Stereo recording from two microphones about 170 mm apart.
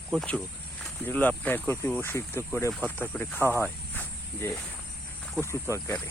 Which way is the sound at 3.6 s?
10° left (ahead or behind).